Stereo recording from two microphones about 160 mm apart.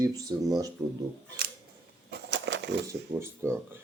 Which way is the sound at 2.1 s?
90° right.